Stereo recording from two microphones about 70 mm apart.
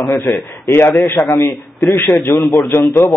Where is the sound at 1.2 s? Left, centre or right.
Left.